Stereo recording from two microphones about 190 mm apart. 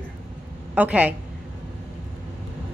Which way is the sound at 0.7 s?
10° right (ahead or behind).